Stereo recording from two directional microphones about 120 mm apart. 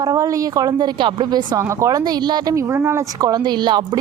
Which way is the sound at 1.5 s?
25° right (ahead or behind).